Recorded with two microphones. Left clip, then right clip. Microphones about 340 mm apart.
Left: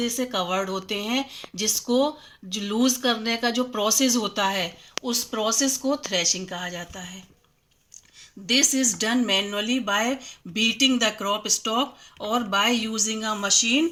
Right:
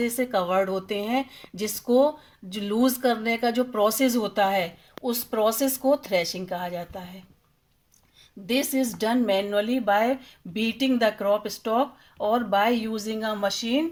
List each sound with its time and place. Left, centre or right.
0.0 s speech: right
8.4 s speech: right